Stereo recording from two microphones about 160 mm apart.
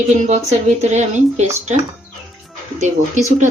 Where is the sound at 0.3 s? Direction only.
45° right (ahead or behind).